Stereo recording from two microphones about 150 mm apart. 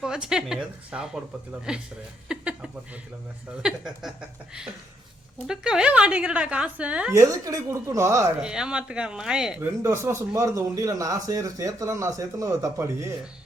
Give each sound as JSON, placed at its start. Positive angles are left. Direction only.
{"t": 0.0, "sound": "speech", "side_deg": -5}
{"t": 2.2, "sound": "a sound", "side_deg": -5}
{"t": 3.6, "sound": "speech", "side_deg": -5}
{"t": 5.5, "sound": "a woman's voice", "side_deg": -5}
{"t": 7.1, "sound": "a man's voice", "side_deg": -20}
{"t": 8.4, "sound": "speech", "side_deg": -5}
{"t": 9.8, "sound": "a man's voice", "side_deg": -20}